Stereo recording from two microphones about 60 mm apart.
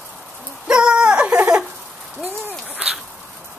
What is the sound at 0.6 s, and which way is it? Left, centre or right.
Wail, centre.